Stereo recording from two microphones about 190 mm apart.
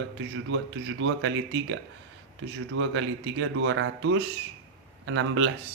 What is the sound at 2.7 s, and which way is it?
A man's voice, 90° right.